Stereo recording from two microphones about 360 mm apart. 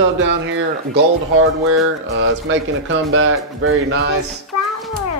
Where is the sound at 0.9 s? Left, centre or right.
Right.